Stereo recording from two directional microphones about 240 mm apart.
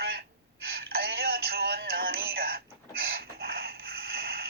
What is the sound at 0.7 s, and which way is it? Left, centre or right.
Music, right.